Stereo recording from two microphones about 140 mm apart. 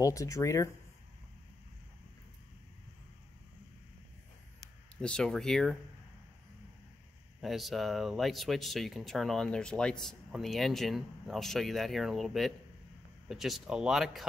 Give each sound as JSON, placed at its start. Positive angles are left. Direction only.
{"t": 0.0, "sound": "speech", "side_deg": 25}
{"t": 5.0, "sound": "speech", "side_deg": 5}
{"t": 7.4, "sound": "speech", "side_deg": 0}